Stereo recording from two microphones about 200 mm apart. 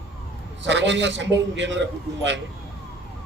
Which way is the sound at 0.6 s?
65° right (ahead or behind).